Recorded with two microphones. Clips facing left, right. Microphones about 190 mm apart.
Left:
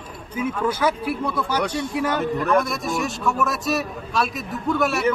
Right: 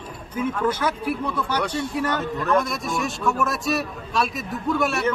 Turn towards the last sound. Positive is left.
turn(degrees=0)  # may be behind; listen again after turning